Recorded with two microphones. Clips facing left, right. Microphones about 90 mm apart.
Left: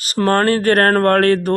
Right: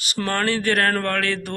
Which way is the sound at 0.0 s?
40° left (ahead or behind).